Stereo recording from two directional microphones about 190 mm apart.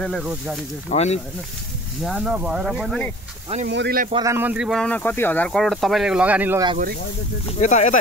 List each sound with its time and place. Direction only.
0.0 s speech: centre (ahead or behind)
0.8 s speech: 35° left (ahead or behind)
2.0 s speech: 5° right (ahead or behind)
3.6 s speech: 60° right (ahead or behind)
4.1 s speech: 15° right (ahead or behind)
7.4 s speech: 35° left (ahead or behind)